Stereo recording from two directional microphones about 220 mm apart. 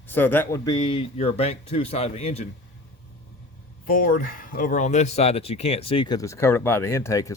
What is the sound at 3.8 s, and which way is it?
Speech, 40° left (ahead or behind).